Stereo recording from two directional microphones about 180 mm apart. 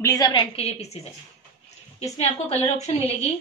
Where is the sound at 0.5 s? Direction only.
35° left (ahead or behind).